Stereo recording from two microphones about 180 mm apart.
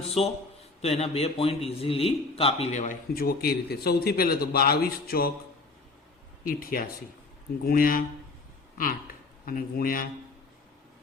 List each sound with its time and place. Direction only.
0.2 s a man's voice: 35° left (ahead or behind)
3.2 s a man's voice: 60° left (ahead or behind)
6.4 s speech: 55° left (ahead or behind)
9.5 s speech: 55° left (ahead or behind)